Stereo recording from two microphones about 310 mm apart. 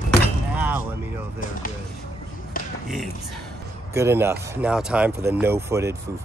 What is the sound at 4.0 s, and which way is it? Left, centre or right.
Speech, centre.